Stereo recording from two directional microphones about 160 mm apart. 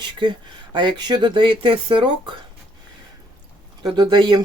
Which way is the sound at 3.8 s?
30° right (ahead or behind).